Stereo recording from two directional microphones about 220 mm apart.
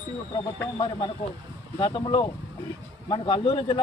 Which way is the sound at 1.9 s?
20° left (ahead or behind).